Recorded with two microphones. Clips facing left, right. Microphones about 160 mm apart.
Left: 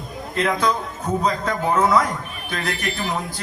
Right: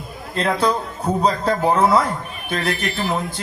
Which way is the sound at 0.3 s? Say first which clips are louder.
Right 2 dB; 30° right (ahead or behind).